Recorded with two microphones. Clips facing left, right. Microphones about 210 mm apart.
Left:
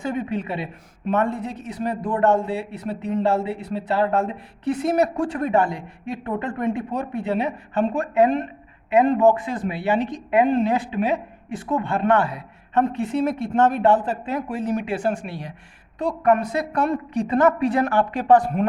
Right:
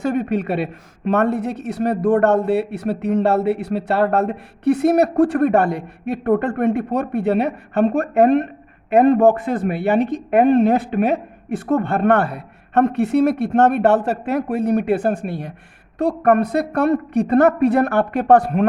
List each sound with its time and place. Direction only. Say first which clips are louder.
0.0 s a woman's voice: right 6 dB; 70° right (ahead or behind)